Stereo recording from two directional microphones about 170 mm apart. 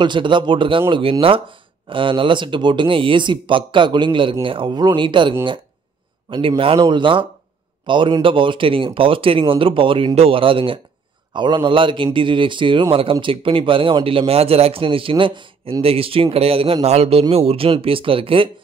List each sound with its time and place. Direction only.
0.0 s speech: 25° right (ahead or behind)
6.3 s speech: 30° right (ahead or behind)